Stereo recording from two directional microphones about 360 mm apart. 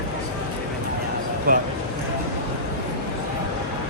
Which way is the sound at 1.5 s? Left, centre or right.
Right.